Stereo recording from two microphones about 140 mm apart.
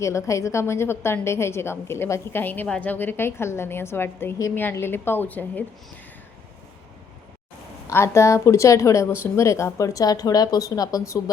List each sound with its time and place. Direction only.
0.0 s a woman's voice: 20° left (ahead or behind)
7.9 s speech: 20° left (ahead or behind)